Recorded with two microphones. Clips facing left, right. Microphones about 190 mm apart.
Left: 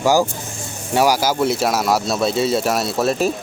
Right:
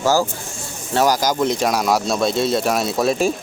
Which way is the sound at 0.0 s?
15° left (ahead or behind).